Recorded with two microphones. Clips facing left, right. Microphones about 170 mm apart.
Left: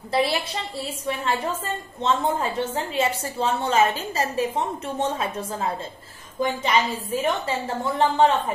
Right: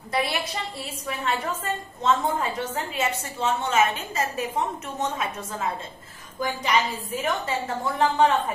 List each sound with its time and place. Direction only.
0.1 s a woman's voice: 30° left (ahead or behind)